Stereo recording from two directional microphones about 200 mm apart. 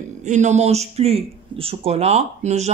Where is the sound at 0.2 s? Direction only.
35° right (ahead or behind).